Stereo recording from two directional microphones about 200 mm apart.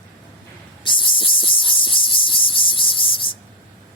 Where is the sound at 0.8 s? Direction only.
25° left (ahead or behind).